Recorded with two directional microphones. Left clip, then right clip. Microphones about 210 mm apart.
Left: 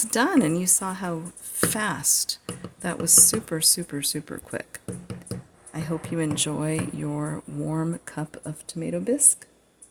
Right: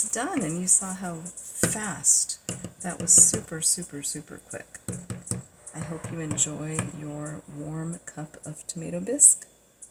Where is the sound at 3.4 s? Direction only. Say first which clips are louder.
Left 5 dB; 55° left (ahead or behind).